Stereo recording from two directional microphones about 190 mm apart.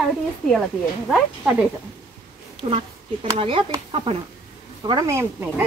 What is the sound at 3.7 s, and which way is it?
Speech, 25° right (ahead or behind).